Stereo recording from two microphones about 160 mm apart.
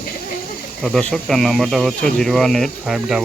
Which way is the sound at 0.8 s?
Centre (ahead or behind).